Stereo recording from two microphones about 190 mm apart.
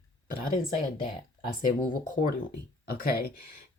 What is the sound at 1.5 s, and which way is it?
Speech, 45° left (ahead or behind).